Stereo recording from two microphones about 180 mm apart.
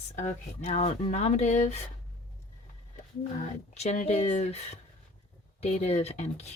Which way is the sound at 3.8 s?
40° left (ahead or behind).